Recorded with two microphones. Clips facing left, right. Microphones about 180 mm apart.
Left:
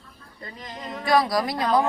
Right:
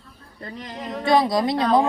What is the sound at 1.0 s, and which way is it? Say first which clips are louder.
Speech: right 3 dB; 25° right (ahead or behind).